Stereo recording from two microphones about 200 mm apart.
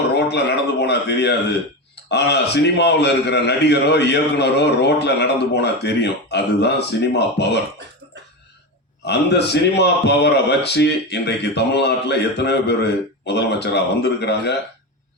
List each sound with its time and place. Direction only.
0.1 s a man's voice: 55° left (ahead or behind)
9.0 s a man's voice: 55° left (ahead or behind)